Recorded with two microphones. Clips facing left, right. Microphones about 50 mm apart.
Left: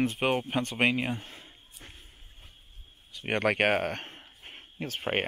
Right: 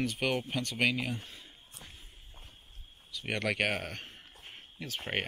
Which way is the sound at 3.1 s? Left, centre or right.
Left.